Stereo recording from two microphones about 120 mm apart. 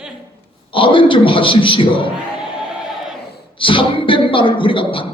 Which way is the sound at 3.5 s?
45° left (ahead or behind).